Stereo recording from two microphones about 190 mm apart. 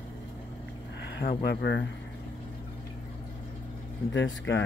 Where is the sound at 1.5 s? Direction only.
60° left (ahead or behind).